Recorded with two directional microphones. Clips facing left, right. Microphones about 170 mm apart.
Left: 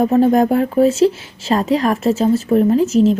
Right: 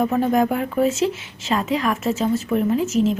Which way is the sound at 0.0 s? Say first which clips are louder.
Left 6 dB; 35° left (ahead or behind).